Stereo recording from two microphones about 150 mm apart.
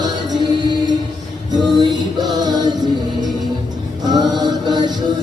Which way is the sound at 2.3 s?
30° right (ahead or behind).